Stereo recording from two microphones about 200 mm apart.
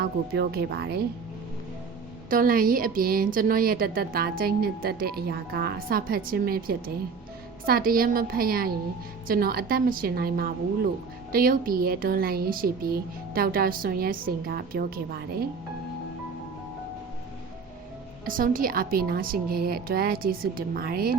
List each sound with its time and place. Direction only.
0.0 s a woman's voice: 50° right (ahead or behind)
2.3 s a woman's voice: 45° right (ahead or behind)
18.3 s a woman's voice: 45° right (ahead or behind)